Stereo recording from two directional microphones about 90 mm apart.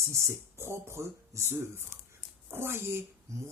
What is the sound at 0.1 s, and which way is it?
Speech, 30° right (ahead or behind).